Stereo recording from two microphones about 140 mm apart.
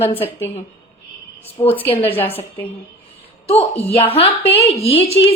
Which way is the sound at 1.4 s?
45° left (ahead or behind).